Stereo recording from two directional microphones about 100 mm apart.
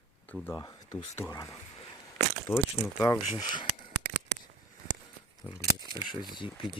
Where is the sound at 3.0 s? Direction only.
35° left (ahead or behind).